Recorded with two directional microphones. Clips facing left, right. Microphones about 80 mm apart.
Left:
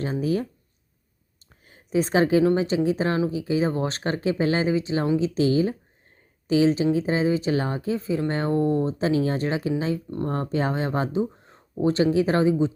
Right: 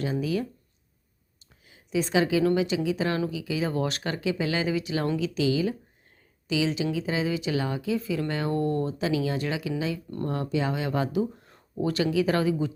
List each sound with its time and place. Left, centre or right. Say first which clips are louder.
0.0 s speech: left 3 dB; left
1.6 s a sound: left 4 dB; left
2.6 s speech: left 3 dB; left
5.3 s speech: left 4 dB; left
8.5 s speech: left 5 dB; left
9.0 s speech: left 4 dB; left